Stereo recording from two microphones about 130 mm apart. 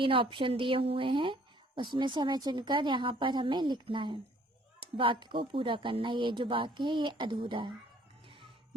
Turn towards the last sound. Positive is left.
turn(degrees=-40)  # may be behind; listen again after turning